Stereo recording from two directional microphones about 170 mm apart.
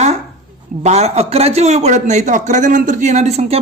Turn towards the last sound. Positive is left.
turn(degrees=-45)  # may be behind; listen again after turning